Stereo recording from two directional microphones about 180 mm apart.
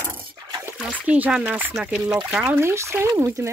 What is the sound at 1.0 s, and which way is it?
Speech, 5° right (ahead or behind).